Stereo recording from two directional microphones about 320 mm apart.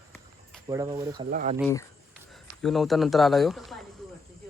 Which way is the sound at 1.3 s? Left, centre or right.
Right.